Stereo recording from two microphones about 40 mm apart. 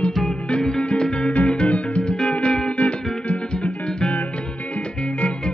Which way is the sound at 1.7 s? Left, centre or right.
Left.